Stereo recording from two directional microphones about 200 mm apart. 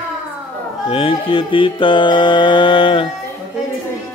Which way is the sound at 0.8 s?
25° left (ahead or behind).